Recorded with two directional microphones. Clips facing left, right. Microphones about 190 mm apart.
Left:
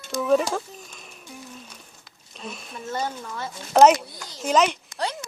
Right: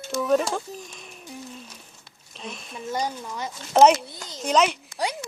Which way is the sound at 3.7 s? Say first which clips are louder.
Left 1 dB; centre (ahead or behind).